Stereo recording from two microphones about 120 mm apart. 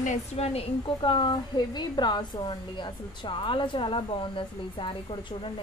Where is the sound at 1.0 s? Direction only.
45° left (ahead or behind).